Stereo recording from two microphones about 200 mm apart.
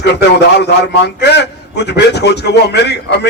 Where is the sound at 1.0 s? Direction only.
55° left (ahead or behind).